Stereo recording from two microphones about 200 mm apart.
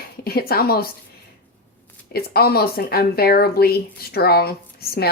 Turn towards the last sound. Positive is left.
turn(degrees=50)  # may be behind; listen again after turning